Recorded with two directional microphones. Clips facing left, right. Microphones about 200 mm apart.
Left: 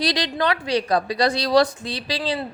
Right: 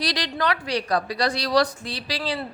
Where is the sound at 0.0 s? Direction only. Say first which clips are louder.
Left 3 dB; 25° left (ahead or behind).